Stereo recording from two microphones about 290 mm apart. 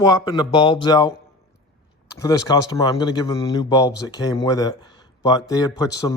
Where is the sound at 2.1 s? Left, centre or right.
Centre.